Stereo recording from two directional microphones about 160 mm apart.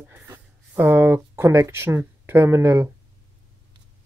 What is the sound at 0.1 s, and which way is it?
Speech, 15° right (ahead or behind).